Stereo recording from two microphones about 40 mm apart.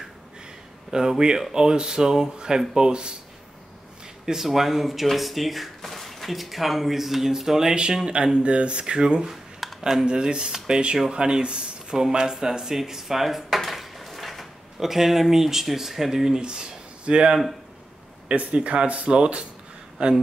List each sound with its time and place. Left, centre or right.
0.9 s speech: centre
4.3 s speech: centre
7.9 s speech: right
9.3 s a sound: centre
10.0 s speech: right
16.3 s speech: right